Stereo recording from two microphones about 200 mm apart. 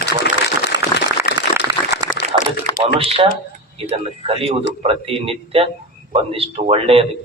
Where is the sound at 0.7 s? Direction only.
20° right (ahead or behind).